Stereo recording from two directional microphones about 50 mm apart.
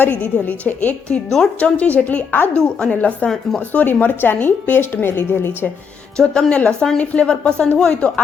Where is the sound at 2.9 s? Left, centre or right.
Left.